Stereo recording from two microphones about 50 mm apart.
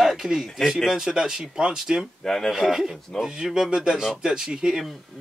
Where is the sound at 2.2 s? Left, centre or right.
Centre.